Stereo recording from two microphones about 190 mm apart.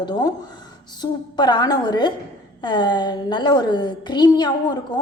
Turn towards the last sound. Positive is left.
turn(degrees=20)  # may be behind; listen again after turning